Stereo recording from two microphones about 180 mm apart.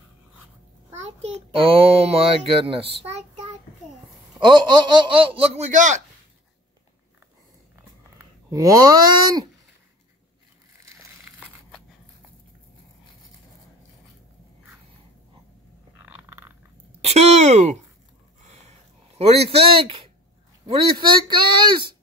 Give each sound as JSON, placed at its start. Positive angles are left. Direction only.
{"t": 1.0, "sound": "a child's voice", "side_deg": -35}
{"t": 4.4, "sound": "speech", "side_deg": -25}
{"t": 8.2, "sound": "speech", "side_deg": -20}
{"t": 16.1, "sound": "a sound", "side_deg": -10}
{"t": 17.0, "sound": "a sound", "side_deg": -35}
{"t": 20.6, "sound": "speech", "side_deg": -25}